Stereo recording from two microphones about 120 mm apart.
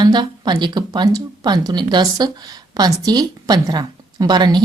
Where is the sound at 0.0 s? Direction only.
40° right (ahead or behind).